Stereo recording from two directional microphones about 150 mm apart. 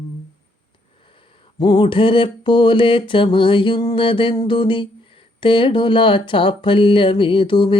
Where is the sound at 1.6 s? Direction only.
30° left (ahead or behind).